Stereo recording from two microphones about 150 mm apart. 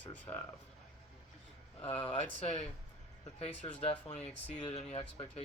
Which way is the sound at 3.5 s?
10° left (ahead or behind).